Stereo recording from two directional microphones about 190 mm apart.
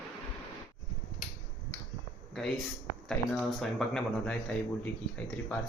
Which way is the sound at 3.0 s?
Centre (ahead or behind).